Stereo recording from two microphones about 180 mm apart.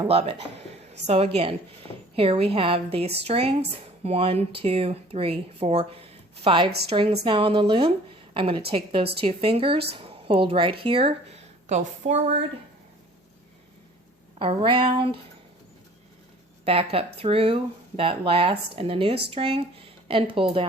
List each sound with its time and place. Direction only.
0.0 s a woman's voice: 30° right (ahead or behind)
14.3 s a woman's voice: 30° right (ahead or behind)
16.6 s speech: 30° right (ahead or behind)